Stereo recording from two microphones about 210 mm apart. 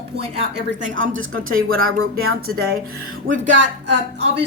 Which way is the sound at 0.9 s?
65° right (ahead or behind).